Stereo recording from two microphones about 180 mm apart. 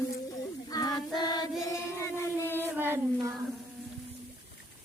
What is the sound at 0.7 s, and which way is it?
Music, 20° left (ahead or behind).